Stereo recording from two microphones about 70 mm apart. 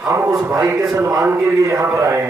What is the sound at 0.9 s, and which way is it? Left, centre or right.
Speech, right.